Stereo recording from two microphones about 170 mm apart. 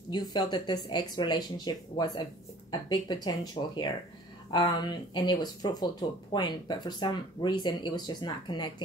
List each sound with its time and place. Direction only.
0.1 s speech: 25° left (ahead or behind)